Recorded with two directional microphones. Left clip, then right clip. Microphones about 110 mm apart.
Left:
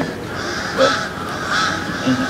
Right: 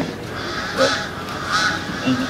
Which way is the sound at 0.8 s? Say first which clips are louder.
Left 3 dB; 45° right (ahead or behind).